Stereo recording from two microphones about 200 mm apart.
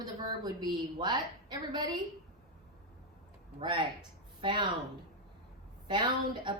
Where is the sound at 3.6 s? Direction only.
20° right (ahead or behind).